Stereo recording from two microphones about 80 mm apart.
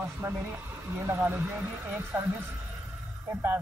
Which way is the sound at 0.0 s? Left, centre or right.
Right.